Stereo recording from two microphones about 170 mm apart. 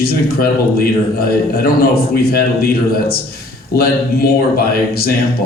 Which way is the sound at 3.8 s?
60° left (ahead or behind).